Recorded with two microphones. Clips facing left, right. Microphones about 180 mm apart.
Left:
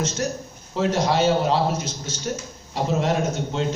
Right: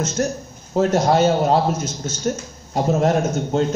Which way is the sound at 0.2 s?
45° right (ahead or behind).